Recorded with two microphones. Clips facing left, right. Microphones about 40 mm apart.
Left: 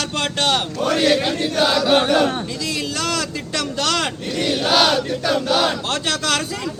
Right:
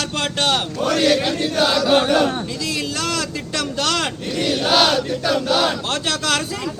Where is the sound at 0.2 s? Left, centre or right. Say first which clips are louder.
Even; centre.